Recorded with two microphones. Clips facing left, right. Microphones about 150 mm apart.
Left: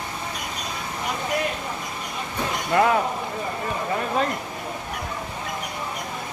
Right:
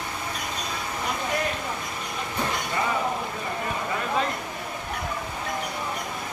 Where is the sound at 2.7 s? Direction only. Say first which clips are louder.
Left 9 dB; 65° left (ahead or behind).